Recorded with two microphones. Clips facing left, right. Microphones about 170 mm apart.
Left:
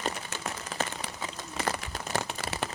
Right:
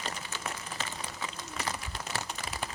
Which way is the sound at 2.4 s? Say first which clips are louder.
Left 4 dB; 75° left (ahead or behind).